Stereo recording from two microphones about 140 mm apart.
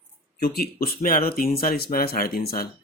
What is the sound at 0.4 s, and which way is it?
Speech, 90° left.